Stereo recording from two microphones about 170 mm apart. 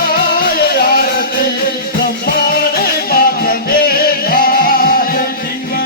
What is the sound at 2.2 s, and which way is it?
Music, 65° left (ahead or behind).